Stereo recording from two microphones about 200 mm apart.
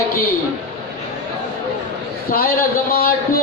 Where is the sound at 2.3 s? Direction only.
50° left (ahead or behind).